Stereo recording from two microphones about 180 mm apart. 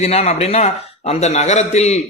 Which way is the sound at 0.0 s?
35° left (ahead or behind).